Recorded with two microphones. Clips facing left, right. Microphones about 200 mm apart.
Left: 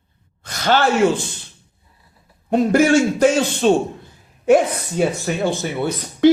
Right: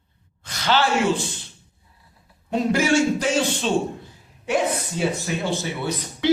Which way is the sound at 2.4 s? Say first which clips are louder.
Left 6 dB; 50° left (ahead or behind).